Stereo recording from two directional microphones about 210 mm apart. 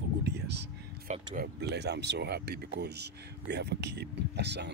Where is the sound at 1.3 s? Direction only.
50° right (ahead or behind).